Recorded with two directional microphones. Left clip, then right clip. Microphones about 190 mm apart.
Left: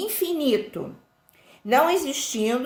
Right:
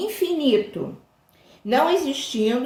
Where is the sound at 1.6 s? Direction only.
15° left (ahead or behind).